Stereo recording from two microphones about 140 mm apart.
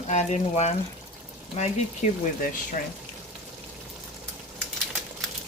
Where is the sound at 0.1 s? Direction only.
55° left (ahead or behind).